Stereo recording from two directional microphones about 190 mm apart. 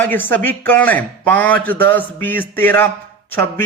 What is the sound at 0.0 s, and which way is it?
A man's voice, 10° left (ahead or behind).